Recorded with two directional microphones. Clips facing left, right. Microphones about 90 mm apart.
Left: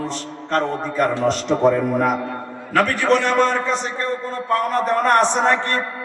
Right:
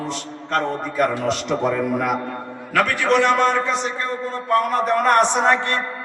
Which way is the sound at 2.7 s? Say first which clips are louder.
Left 1 dB; 40° left (ahead or behind).